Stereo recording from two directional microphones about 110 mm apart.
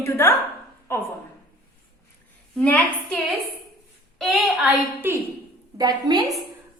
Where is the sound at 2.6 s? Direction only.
15° left (ahead or behind).